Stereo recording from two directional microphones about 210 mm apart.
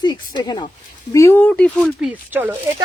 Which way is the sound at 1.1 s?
10° left (ahead or behind).